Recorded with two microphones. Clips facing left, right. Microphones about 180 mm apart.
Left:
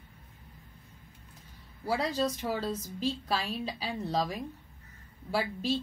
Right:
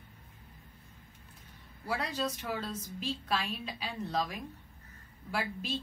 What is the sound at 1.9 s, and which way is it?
A woman's voice, 35° left (ahead or behind).